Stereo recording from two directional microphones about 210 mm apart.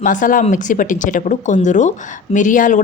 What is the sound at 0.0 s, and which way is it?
A woman's voice, 40° left (ahead or behind).